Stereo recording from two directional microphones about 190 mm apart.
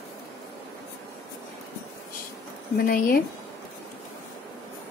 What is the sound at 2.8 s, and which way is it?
Speech, 50° left (ahead or behind).